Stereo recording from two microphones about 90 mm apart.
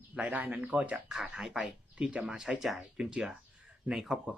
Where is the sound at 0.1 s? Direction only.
15° right (ahead or behind).